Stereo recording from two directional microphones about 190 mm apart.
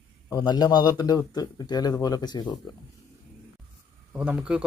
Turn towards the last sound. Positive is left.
turn(degrees=-5)  # may be behind; listen again after turning